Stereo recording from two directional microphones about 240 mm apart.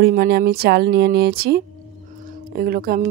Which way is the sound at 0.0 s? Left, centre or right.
Right.